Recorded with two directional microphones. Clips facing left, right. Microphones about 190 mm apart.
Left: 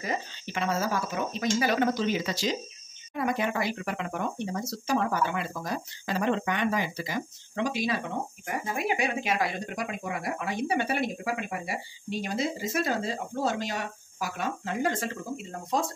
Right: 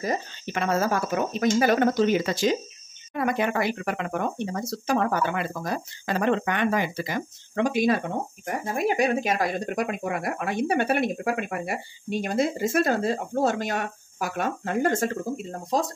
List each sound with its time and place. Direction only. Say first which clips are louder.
0.0 s speech: right 5 dB; 40° right (ahead or behind)
0.6 s speech: right 4 dB; 55° right (ahead or behind)
8.7 s speech: right 7 dB; 40° right (ahead or behind)